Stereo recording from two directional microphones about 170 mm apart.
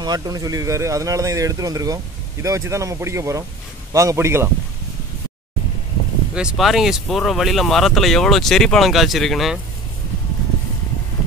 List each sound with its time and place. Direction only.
0.0 s speech: 20° right (ahead or behind)
6.3 s speech: 5° right (ahead or behind)